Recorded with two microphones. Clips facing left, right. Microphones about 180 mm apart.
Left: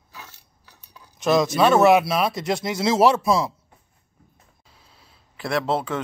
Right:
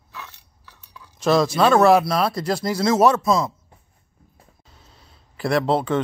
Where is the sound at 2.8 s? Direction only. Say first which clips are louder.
Right 1 dB; 30° left (ahead or behind).